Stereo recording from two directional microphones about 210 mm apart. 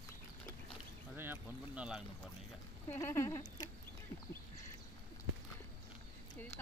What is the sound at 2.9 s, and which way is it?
Speech, 10° left (ahead or behind).